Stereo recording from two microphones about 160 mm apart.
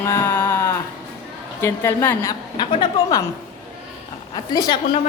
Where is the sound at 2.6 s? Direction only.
30° left (ahead or behind).